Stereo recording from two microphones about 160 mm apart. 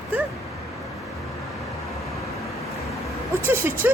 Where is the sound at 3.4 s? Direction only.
15° right (ahead or behind).